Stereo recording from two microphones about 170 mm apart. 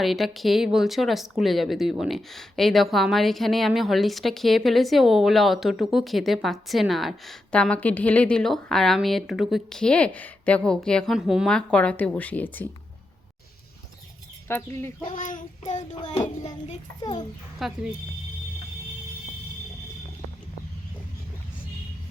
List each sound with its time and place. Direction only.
0.0 s speech: centre (ahead or behind)
14.4 s speech: 15° left (ahead or behind)
15.0 s child singing: 50° left (ahead or behind)
15.9 s child singing: 25° left (ahead or behind)
17.6 s speech: centre (ahead or behind)